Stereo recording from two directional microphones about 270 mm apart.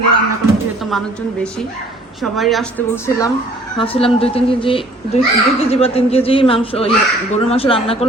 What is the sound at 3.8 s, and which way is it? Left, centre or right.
A woman's voice, centre.